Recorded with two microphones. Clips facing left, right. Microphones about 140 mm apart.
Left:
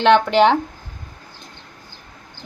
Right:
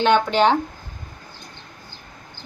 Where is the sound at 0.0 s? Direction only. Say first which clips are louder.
Left 3 dB; 80° left.